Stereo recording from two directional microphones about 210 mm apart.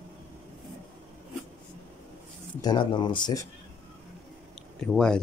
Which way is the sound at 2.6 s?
20° left (ahead or behind).